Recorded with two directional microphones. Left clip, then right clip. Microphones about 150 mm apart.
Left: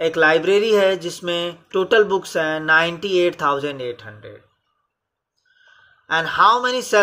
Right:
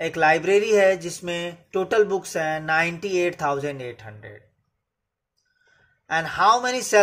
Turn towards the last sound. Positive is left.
turn(degrees=-25)  # may be behind; listen again after turning